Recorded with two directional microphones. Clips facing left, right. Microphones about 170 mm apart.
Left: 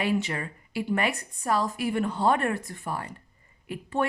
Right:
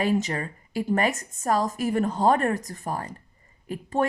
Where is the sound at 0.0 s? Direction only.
40° right (ahead or behind).